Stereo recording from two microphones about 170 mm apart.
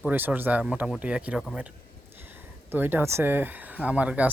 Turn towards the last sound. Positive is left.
turn(degrees=-10)  # may be behind; listen again after turning